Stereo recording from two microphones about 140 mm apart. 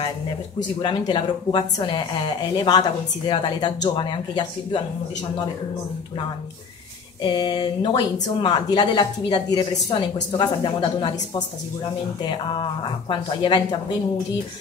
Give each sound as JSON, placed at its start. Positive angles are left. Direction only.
{"t": 0.7, "sound": "a woman's voice", "side_deg": 35}
{"t": 7.2, "sound": "a woman's voice", "side_deg": 30}
{"t": 13.1, "sound": "a woman's voice", "side_deg": 35}